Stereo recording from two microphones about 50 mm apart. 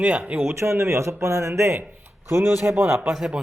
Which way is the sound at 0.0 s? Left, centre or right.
Right.